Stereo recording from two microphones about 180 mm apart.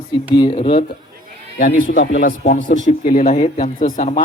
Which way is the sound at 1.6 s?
50° left (ahead or behind).